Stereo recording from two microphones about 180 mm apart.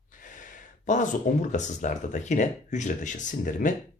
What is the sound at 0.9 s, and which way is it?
Speech, 45° left (ahead or behind).